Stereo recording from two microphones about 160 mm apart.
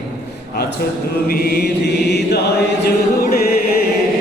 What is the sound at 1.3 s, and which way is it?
Mantra, 80° left.